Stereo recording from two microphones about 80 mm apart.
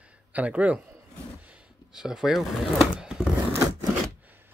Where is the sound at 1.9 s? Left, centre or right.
Centre.